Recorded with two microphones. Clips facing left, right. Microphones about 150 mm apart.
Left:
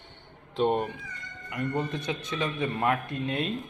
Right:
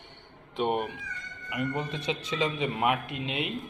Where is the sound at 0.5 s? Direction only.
10° right (ahead or behind).